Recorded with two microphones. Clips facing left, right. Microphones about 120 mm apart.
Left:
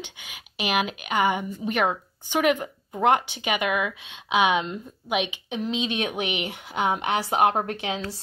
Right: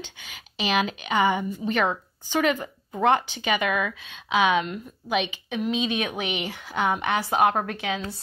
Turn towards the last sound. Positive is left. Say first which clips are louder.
# even
turn(degrees=25)  # may be behind; listen again after turning